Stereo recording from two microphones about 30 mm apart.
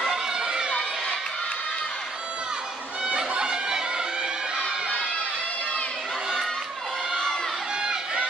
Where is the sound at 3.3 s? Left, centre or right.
Right.